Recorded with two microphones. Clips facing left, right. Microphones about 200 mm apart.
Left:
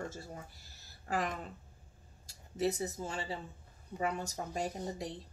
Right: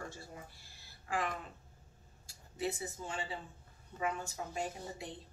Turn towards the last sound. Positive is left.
turn(degrees=40)  # may be behind; listen again after turning